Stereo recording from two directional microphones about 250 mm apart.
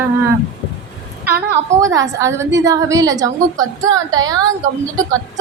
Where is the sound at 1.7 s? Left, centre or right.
Centre.